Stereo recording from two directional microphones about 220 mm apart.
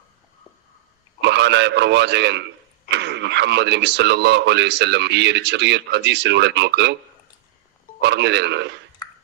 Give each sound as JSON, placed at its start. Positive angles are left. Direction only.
{"t": 1.2, "sound": "speech", "side_deg": -50}
{"t": 8.0, "sound": "speech", "side_deg": -50}